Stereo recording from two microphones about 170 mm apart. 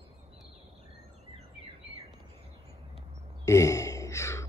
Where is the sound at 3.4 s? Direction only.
20° left (ahead or behind).